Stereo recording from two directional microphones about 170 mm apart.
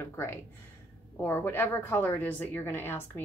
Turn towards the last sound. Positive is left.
turn(degrees=15)  # may be behind; listen again after turning